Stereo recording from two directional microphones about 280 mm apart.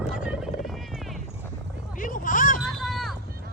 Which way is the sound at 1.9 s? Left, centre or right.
Left.